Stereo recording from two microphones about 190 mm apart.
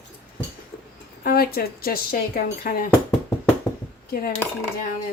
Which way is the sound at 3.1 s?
10° left (ahead or behind).